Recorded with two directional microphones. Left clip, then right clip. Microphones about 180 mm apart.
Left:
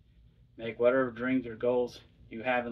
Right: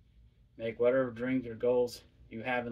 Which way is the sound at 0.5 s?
30° right (ahead or behind).